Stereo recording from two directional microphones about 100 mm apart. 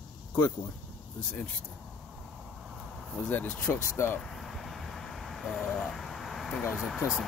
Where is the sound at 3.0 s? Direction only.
5° left (ahead or behind).